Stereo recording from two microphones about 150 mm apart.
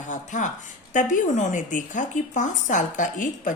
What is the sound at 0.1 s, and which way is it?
Speech, 55° left (ahead or behind).